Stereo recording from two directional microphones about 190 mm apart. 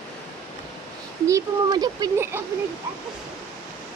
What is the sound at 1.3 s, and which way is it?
Speech, 20° right (ahead or behind).